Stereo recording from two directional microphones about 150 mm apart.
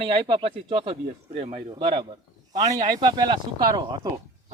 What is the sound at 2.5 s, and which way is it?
Speech, 30° right (ahead or behind).